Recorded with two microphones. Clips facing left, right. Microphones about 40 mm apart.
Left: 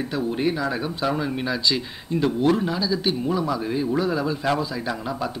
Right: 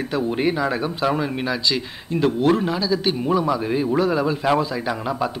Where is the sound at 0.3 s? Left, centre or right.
Right.